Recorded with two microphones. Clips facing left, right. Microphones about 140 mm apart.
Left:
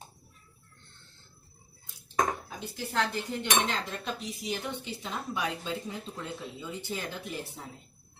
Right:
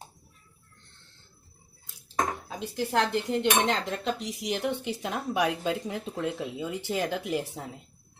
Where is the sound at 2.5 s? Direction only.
75° right (ahead or behind).